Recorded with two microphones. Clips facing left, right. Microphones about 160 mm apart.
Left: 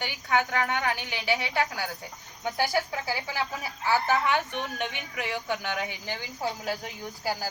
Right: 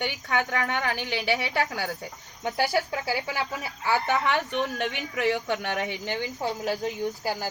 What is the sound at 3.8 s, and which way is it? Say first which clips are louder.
Speech: even; 65° right (ahead or behind).